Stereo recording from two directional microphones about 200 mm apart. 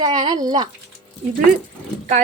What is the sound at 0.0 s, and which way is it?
Speech, 25° right (ahead or behind).